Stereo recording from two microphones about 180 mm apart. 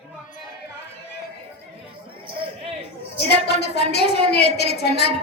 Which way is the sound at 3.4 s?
65° left (ahead or behind).